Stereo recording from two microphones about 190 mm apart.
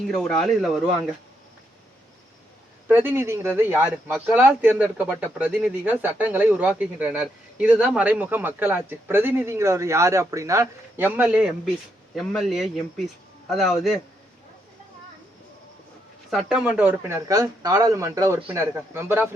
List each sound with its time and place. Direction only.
0.1 s speech: 5° left (ahead or behind)
2.8 s speech: 10° right (ahead or behind)
16.3 s speech: 5° right (ahead or behind)